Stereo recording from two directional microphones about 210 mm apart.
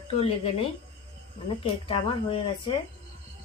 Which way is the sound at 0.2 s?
30° left (ahead or behind).